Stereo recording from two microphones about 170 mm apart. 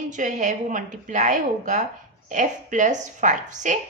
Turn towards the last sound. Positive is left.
turn(degrees=-45)  # may be behind; listen again after turning